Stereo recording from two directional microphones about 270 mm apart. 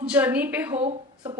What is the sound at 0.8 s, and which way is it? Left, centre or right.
Speech, centre.